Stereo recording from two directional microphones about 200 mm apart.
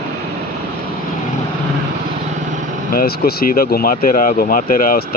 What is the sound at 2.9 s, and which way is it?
Speech, 50° left (ahead or behind).